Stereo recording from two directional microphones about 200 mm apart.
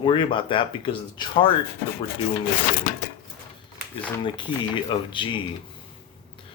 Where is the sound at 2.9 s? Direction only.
45° left (ahead or behind).